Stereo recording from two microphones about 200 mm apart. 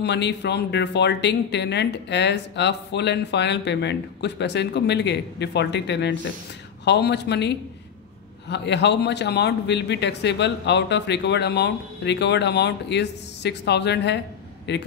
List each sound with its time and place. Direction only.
0.0 s speech: 60° left (ahead or behind)